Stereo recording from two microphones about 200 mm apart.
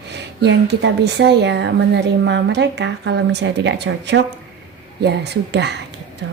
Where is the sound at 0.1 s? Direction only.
60° right (ahead or behind).